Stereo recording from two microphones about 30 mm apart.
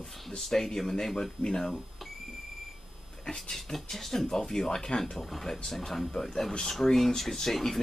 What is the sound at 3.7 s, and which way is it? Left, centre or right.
Speech, centre.